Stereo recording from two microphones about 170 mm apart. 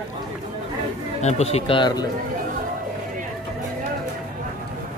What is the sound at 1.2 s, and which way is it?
Speech, 40° left (ahead or behind).